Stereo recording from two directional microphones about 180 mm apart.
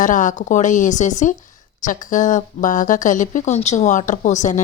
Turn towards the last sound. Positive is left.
turn(degrees=40)  # may be behind; listen again after turning